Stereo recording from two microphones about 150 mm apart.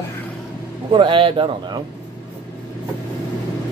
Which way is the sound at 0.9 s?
35° right (ahead or behind).